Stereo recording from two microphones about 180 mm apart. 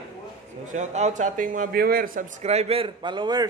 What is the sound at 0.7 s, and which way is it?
A man's voice, 40° right (ahead or behind).